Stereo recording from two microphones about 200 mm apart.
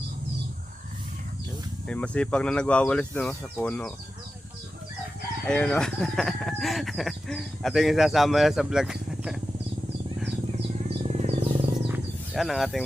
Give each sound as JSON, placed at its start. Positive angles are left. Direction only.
{"t": 1.9, "sound": "speech", "side_deg": 5}
{"t": 5.5, "sound": "speech", "side_deg": 5}
{"t": 10.8, "sound": "bird", "side_deg": -30}
{"t": 11.9, "sound": "a sound", "side_deg": 0}